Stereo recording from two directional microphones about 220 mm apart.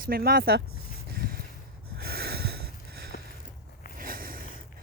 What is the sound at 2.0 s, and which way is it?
Snort, 45° right (ahead or behind).